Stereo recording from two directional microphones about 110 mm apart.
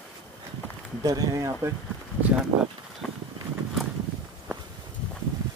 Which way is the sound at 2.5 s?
60° right (ahead or behind).